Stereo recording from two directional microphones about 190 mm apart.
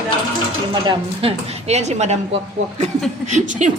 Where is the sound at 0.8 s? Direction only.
30° right (ahead or behind).